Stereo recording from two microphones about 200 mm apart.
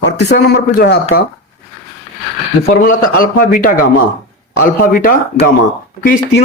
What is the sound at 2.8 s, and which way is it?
Speech, 45° left (ahead or behind).